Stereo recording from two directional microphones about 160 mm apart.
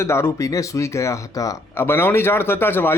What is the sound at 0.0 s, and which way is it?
A man's voice, 15° left (ahead or behind).